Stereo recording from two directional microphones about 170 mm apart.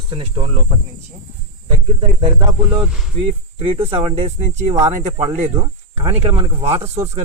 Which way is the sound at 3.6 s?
35° right (ahead or behind).